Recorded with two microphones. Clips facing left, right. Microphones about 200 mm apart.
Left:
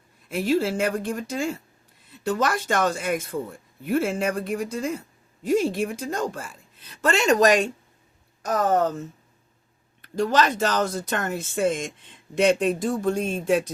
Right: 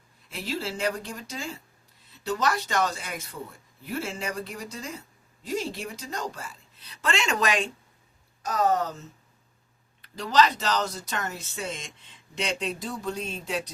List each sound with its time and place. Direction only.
0.3 s speech: 50° left (ahead or behind)